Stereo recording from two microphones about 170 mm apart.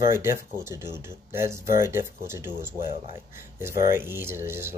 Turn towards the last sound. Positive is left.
turn(degrees=-15)  # may be behind; listen again after turning